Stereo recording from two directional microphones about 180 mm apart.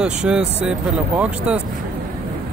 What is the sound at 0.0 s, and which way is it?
Speech, 5° right (ahead or behind).